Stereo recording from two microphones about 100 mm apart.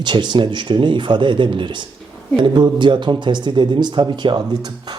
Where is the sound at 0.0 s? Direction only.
50° right (ahead or behind).